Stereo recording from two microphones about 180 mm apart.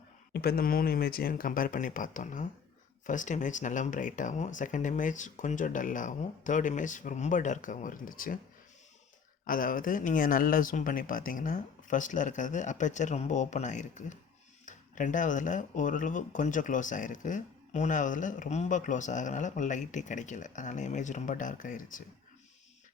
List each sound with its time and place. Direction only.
0.3 s speech: 55° left (ahead or behind)
9.5 s speech: 50° left (ahead or behind)